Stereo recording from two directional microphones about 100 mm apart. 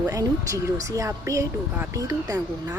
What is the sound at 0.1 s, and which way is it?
Speech, 35° right (ahead or behind).